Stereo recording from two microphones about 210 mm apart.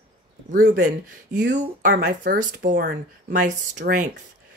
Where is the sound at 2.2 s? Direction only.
40° right (ahead or behind).